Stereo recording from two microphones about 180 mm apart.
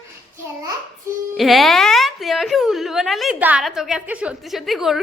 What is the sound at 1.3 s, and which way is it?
Speech, centre (ahead or behind).